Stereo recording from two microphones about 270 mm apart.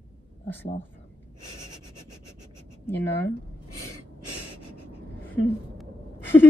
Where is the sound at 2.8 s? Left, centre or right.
Centre.